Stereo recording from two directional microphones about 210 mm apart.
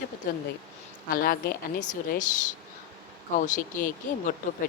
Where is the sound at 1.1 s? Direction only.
45° left (ahead or behind).